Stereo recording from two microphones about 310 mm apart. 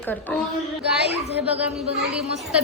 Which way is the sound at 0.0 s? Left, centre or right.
Centre.